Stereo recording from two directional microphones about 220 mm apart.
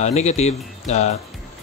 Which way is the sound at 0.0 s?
30° left (ahead or behind).